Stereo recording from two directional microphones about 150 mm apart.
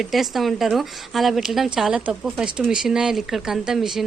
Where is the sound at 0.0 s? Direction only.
Centre (ahead or behind).